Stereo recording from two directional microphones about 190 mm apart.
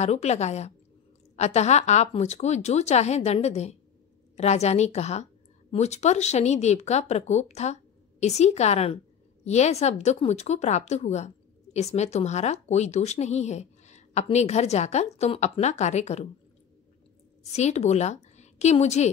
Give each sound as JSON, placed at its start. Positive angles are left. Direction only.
{"t": 0.0, "sound": "a woman's voice", "side_deg": 35}
{"t": 17.4, "sound": "a woman's voice", "side_deg": 35}